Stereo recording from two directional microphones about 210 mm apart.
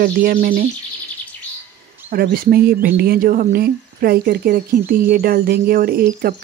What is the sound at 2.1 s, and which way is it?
Speech, 45° right (ahead or behind).